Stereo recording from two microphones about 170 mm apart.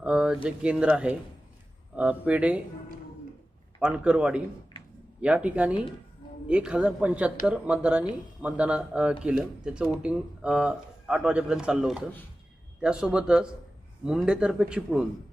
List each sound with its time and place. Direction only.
0.0 s a sound: 5° right (ahead or behind)
0.4 s speech: 5° right (ahead or behind)
3.8 s speech: 5° right (ahead or behind)